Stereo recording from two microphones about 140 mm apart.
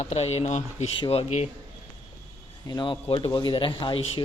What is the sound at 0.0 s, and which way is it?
Speech, 50° left (ahead or behind).